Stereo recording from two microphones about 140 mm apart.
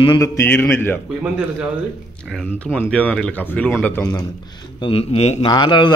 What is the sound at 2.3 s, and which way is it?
Speech, 10° left (ahead or behind).